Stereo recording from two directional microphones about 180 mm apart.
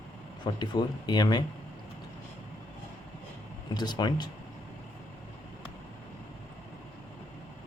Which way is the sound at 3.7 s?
25° left (ahead or behind).